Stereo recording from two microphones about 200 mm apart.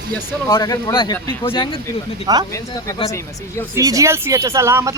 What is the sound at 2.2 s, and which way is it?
Speech, 20° right (ahead or behind).